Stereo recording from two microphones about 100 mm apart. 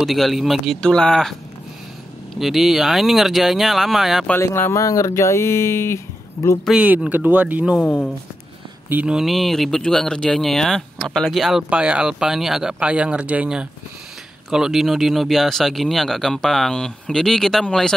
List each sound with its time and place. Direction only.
0.0 s speech: centre (ahead or behind)
2.3 s speech: centre (ahead or behind)
4.4 s speech: 25° left (ahead or behind)
6.7 s speech: 10° right (ahead or behind)
7.8 s speech: 15° left (ahead or behind)
9.0 s speech: 5° right (ahead or behind)
11.7 s speech: 10° right (ahead or behind); by 17.9 s 5° left (ahead or behind)